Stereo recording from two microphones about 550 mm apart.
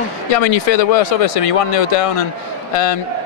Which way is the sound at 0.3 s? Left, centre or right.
Left.